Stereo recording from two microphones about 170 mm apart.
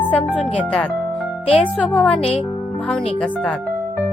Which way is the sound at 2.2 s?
35° left (ahead or behind).